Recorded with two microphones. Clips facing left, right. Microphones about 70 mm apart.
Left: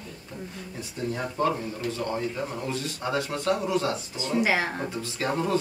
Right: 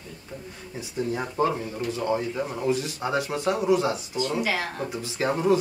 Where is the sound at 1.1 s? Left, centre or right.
Centre.